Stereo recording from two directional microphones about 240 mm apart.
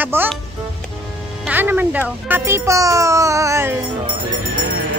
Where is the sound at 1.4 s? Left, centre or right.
Centre.